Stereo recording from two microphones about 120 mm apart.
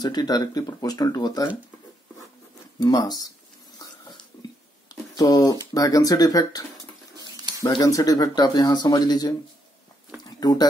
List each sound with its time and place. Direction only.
0.0 s speech: 35° left (ahead or behind)
2.8 s speech: 35° left (ahead or behind)
3.7 s a sound: 35° left (ahead or behind)
5.8 s speech: 30° left (ahead or behind)
7.6 s speech: 30° left (ahead or behind)
10.2 s a sound: 35° left (ahead or behind)